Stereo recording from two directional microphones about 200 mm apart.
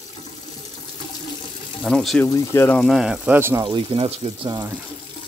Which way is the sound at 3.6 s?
25° right (ahead or behind).